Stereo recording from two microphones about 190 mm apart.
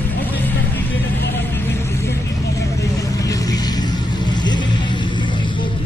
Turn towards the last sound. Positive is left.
turn(degrees=25)  # may be behind; listen again after turning